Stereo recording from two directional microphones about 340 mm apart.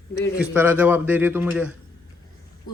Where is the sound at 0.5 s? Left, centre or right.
Centre.